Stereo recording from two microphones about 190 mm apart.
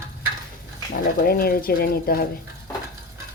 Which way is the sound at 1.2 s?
50° left (ahead or behind).